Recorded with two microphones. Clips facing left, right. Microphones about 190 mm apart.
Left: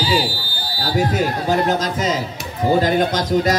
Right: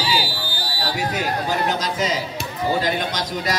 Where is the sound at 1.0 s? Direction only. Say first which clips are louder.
Left 6 dB; 45° left (ahead or behind).